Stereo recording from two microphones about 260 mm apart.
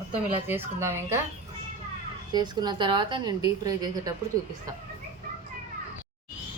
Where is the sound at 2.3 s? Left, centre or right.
Centre.